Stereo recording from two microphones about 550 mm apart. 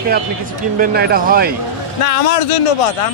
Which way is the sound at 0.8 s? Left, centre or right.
Centre.